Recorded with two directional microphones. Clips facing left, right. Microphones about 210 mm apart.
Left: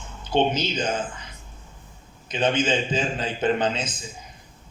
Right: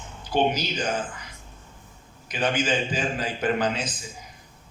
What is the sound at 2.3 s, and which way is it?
A man's voice, 25° left (ahead or behind).